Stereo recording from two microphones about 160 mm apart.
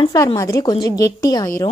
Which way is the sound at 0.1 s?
20° left (ahead or behind).